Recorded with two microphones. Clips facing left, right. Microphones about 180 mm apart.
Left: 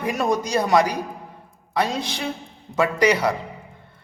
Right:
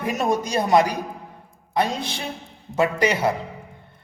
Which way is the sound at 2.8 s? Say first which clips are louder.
Left 1 dB; 20° right (ahead or behind).